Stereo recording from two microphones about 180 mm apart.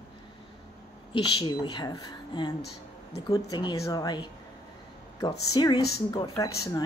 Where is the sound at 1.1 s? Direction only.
25° left (ahead or behind).